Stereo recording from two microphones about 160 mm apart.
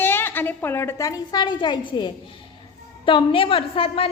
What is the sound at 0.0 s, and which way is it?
A woman's voice, 15° left (ahead or behind).